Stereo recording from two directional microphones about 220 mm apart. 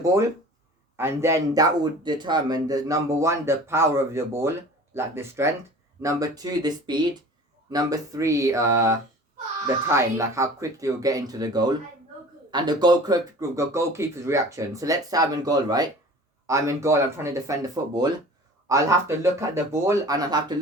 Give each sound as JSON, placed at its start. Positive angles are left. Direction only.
{"t": 0.0, "sound": "speech", "side_deg": -15}